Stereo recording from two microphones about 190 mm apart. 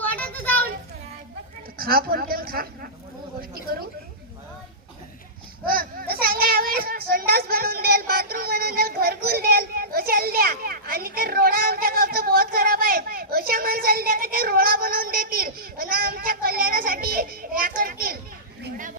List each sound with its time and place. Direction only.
0.0 s children playing: 10° left (ahead or behind)
1.8 s a woman's voice: 50° right (ahead or behind)
5.6 s a sound: 50° right (ahead or behind)